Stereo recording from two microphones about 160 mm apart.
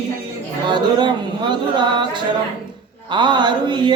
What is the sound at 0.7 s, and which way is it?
Chant, 30° right (ahead or behind).